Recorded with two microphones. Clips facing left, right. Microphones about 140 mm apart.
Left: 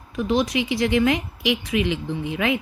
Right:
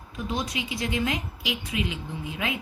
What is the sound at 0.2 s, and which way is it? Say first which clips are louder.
Speech: left 9 dB; 75° left (ahead or behind).